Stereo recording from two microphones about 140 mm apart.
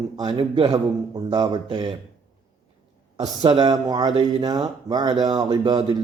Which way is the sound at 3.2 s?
35° right (ahead or behind).